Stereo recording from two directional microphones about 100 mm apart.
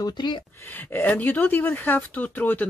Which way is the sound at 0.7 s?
20° left (ahead or behind).